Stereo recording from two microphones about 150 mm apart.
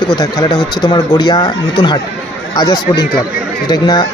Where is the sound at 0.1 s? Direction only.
30° left (ahead or behind).